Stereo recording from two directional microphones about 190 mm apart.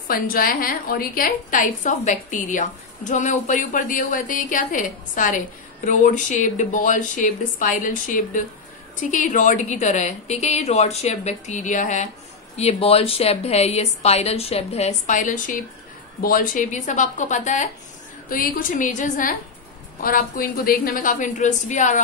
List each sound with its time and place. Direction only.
0.1 s a woman's voice: 50° left (ahead or behind)